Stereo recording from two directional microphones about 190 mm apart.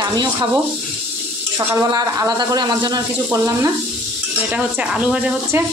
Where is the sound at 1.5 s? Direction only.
20° right (ahead or behind).